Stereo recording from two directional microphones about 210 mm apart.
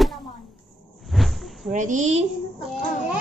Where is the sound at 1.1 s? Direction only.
Centre (ahead or behind).